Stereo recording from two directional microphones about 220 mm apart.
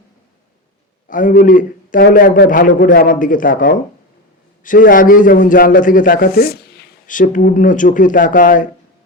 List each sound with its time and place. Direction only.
1.0 s a man's voice: 40° left (ahead or behind)